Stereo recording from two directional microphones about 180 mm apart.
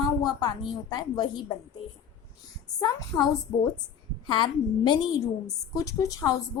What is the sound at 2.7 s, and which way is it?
Speech, 20° left (ahead or behind).